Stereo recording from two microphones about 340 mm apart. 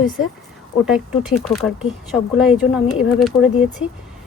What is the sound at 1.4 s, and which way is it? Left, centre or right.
Speech, centre.